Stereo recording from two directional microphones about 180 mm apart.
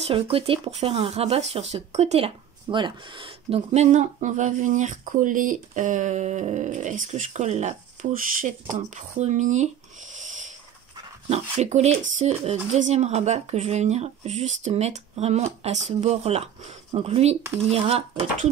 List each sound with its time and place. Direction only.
0.1 s speech: 30° right (ahead or behind)
10.1 s a sound: 45° right (ahead or behind)
11.2 s speech: 40° right (ahead or behind)